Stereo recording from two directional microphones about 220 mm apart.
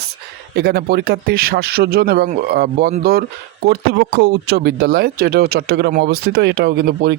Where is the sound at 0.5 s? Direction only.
45° right (ahead or behind).